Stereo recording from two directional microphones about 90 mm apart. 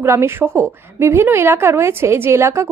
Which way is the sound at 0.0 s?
30° right (ahead or behind).